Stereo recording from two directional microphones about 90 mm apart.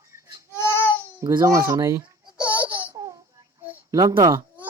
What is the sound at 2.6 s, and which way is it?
Laughter, 20° right (ahead or behind).